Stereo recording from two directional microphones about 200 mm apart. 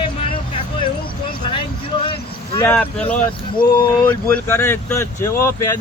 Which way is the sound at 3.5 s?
20° left (ahead or behind).